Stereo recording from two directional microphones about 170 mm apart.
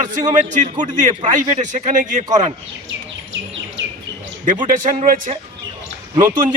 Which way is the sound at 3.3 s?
90° right.